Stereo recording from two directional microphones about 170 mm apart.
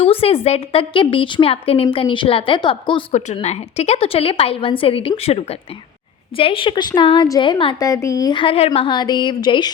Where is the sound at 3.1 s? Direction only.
40° left (ahead or behind).